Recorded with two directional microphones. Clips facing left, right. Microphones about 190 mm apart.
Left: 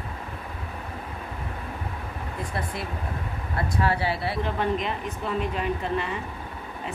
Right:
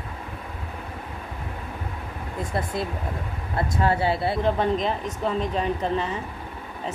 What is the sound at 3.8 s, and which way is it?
Speech, 25° right (ahead or behind).